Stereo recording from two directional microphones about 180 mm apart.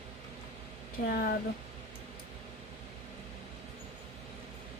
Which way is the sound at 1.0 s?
45° left (ahead or behind).